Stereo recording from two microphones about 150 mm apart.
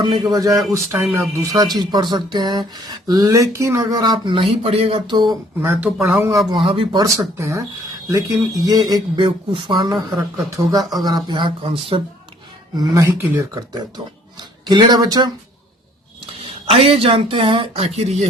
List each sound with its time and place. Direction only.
0.0 s speech: 30° right (ahead or behind)
5.5 s speech: 15° right (ahead or behind)
6.5 s speech: 35° right (ahead or behind)
7.0 s speech: 20° right (ahead or behind); by 12.0 s 35° right (ahead or behind)
12.7 s speech: 25° right (ahead or behind)
16.6 s speech: 40° right (ahead or behind)